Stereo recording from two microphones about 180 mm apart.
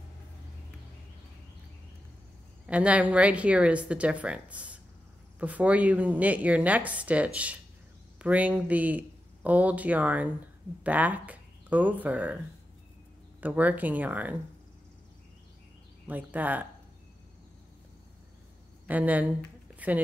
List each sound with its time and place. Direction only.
2.6 s a woman's voice: 5° right (ahead or behind)
13.4 s a woman's voice: 10° right (ahead or behind)
16.1 s a woman's voice: 10° right (ahead or behind)
18.9 s a woman's voice: 10° right (ahead or behind)
19.7 s a sound: 10° right (ahead or behind)